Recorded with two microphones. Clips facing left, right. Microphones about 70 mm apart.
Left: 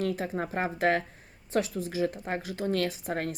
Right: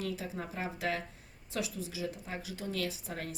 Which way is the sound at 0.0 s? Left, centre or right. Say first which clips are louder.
Left 8 dB; left.